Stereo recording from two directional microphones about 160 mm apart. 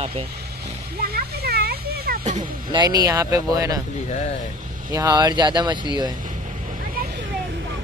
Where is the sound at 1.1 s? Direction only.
80° right.